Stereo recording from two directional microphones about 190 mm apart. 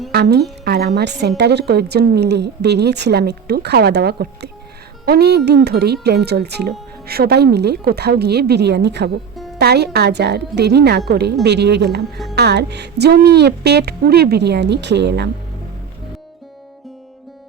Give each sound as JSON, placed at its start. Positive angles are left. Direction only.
{"t": 0.1, "sound": "speech", "side_deg": -60}